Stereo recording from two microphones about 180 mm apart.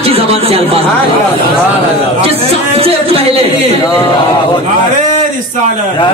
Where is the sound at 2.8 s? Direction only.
30° right (ahead or behind).